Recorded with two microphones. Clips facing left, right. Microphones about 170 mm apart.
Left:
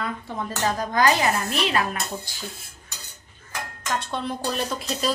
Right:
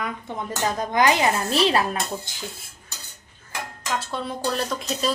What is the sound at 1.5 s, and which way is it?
Speech, 35° right (ahead or behind).